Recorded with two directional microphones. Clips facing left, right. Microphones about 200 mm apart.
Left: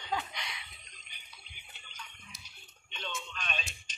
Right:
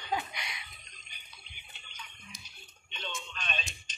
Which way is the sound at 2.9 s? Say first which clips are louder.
Even; centre (ahead or behind).